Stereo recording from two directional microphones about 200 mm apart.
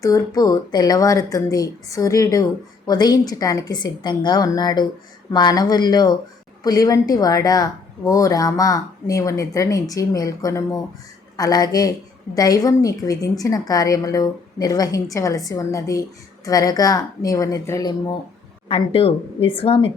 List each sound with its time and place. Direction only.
0.0 s a woman's voice: 15° left (ahead or behind)
18.7 s speech: 30° left (ahead or behind)